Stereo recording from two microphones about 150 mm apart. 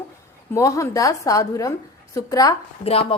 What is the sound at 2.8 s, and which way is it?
Speech, 40° left (ahead or behind).